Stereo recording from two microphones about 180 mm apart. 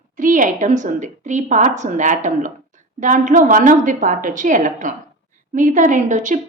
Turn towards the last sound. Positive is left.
turn(degrees=-45)  # may be behind; listen again after turning